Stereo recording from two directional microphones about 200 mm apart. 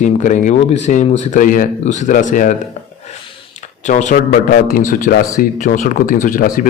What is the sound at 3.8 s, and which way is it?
A man's voice, 40° left (ahead or behind).